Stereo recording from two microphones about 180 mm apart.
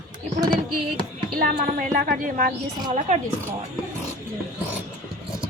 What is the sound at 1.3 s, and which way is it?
A woman's voice, 50° right (ahead or behind).